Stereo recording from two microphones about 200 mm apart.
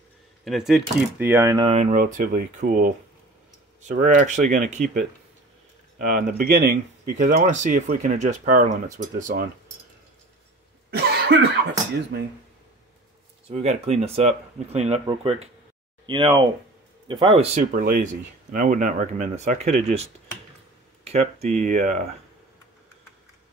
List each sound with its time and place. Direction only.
0.5 s speech: centre (ahead or behind)
1.7 s speech: 35° right (ahead or behind)
10.9 s cough: 55° right (ahead or behind)
13.5 s speech: 30° right (ahead or behind)
17.6 s speech: 40° right (ahead or behind)